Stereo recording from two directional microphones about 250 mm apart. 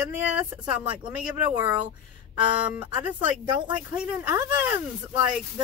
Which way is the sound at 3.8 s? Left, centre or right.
Centre.